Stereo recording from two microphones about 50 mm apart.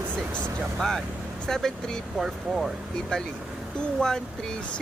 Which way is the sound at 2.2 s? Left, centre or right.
Centre.